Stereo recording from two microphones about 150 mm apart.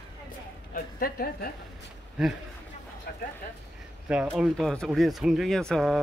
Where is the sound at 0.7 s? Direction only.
80° left.